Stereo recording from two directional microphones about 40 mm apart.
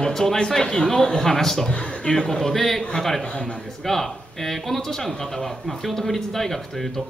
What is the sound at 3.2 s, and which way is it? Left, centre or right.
Speech, left.